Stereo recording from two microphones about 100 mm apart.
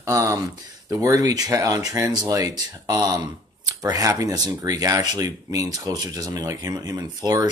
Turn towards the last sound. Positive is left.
turn(degrees=-40)  # may be behind; listen again after turning